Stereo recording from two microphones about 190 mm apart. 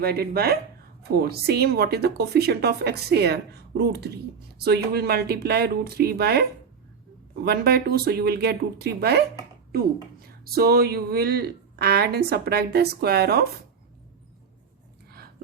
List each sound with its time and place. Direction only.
0.0 s a woman's voice: 55° right (ahead or behind)
7.4 s a woman's voice: 55° right (ahead or behind)